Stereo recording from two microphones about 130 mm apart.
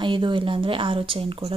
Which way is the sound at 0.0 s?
40° right (ahead or behind).